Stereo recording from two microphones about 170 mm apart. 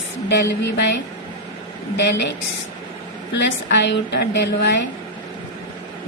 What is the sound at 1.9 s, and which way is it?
Speech, 90° left.